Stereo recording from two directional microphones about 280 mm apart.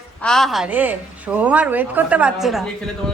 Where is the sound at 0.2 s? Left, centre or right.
Centre.